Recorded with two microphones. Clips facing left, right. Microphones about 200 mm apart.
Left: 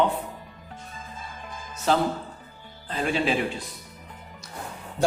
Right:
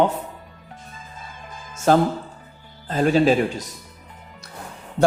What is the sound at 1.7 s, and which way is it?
Music, 50° right (ahead or behind).